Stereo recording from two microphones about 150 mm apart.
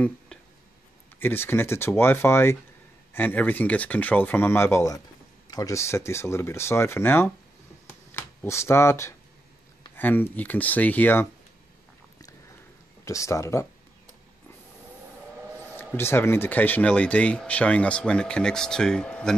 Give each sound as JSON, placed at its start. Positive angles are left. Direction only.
{"t": 1.2, "sound": "speech", "side_deg": 15}
{"t": 13.0, "sound": "speech", "side_deg": 20}
{"t": 16.0, "sound": "speech", "side_deg": 15}